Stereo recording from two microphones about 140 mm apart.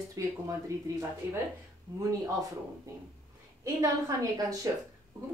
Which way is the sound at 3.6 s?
20° right (ahead or behind).